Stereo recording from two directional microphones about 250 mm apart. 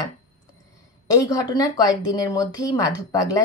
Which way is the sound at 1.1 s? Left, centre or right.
Centre.